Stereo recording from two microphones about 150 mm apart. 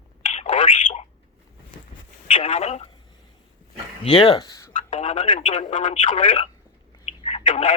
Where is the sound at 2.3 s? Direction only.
50° left (ahead or behind).